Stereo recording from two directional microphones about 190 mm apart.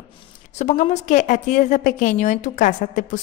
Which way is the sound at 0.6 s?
40° left (ahead or behind).